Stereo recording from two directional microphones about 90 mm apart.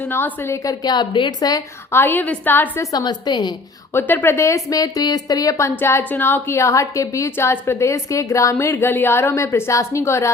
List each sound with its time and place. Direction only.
0.1 s speech: 25° left (ahead or behind)
0.9 s a woman's voice: 60° left (ahead or behind)
1.9 s a woman's voice: 25° left (ahead or behind)
2.9 s a woman's voice: 50° left (ahead or behind)
3.9 s speech: 20° left (ahead or behind)